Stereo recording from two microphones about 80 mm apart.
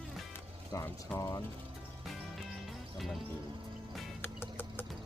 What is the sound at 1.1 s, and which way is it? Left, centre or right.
Speech, centre.